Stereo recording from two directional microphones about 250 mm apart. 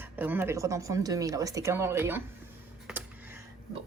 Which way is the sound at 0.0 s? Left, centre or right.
Centre.